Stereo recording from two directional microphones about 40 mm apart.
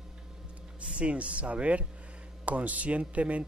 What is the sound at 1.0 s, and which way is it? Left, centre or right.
Speech, right.